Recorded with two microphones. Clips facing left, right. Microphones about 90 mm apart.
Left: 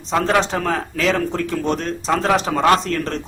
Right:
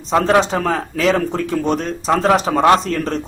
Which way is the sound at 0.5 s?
5° right (ahead or behind).